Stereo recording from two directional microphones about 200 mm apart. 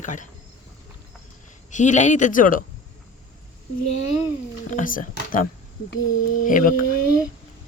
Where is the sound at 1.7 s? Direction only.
35° left (ahead or behind).